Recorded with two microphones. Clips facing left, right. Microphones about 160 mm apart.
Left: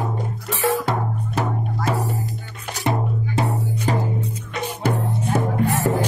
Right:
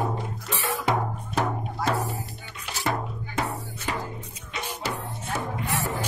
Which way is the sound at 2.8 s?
25° left (ahead or behind).